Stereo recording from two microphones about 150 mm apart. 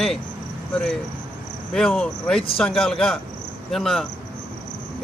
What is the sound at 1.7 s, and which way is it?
Speech, centre (ahead or behind).